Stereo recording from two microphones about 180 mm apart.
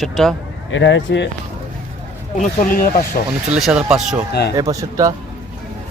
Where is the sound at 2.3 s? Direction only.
50° left (ahead or behind).